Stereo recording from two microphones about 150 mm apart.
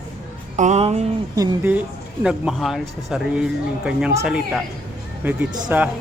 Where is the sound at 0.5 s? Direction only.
50° right (ahead or behind).